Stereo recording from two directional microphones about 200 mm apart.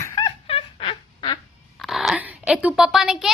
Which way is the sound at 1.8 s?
Centre (ahead or behind).